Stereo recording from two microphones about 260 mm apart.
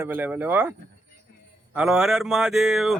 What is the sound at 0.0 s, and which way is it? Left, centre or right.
Speech, centre.